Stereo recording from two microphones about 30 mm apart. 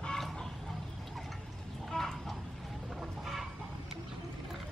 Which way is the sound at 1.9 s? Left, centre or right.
Left.